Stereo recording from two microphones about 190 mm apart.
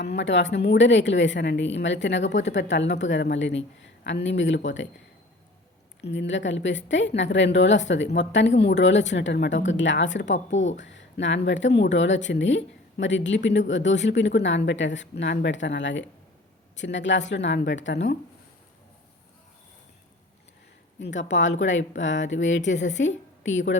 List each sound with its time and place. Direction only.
0.0 s speech: 65° left (ahead or behind)
6.0 s speech: 70° left (ahead or behind)
21.2 s a woman's voice: 70° left (ahead or behind)